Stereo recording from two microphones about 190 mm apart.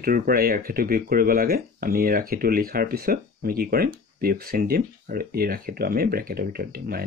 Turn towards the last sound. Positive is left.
turn(degrees=-55)  # may be behind; listen again after turning